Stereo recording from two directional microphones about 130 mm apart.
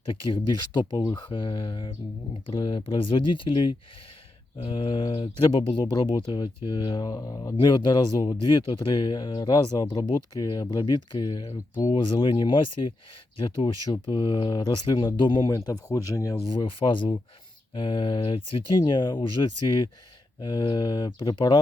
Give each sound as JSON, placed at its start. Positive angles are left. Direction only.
{"t": 0.1, "sound": "speech", "side_deg": 40}
{"t": 5.6, "sound": "speech", "side_deg": 30}